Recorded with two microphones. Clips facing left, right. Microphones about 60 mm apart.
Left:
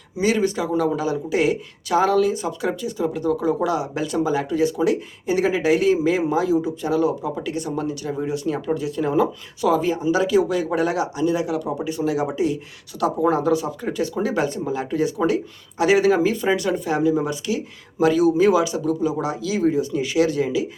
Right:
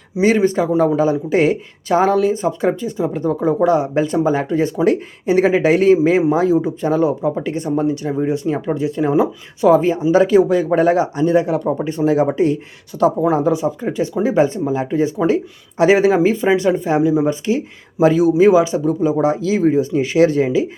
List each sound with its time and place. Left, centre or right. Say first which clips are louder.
0.2 s speech: right 6 dB; right